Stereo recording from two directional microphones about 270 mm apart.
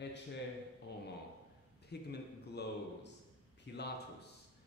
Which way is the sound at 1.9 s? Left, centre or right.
Left.